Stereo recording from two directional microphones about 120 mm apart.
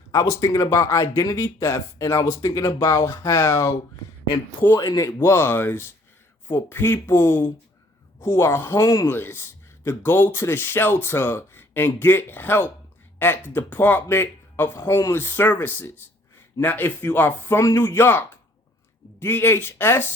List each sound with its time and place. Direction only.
0.1 s speech: 25° left (ahead or behind)
4.9 s speech: 30° left (ahead or behind)